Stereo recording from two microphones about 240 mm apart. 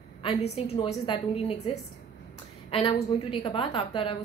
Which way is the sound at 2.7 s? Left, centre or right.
Left.